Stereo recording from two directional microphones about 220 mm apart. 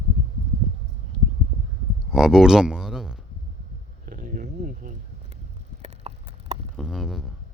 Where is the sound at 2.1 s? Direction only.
Centre (ahead or behind).